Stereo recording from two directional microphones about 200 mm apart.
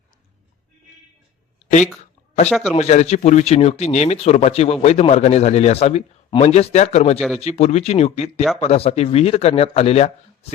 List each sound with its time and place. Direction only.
2.5 s a man's voice: centre (ahead or behind)
2.7 s speech: 35° left (ahead or behind)